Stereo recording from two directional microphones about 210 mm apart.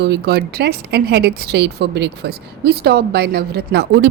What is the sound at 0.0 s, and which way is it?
A woman's voice, 50° right (ahead or behind).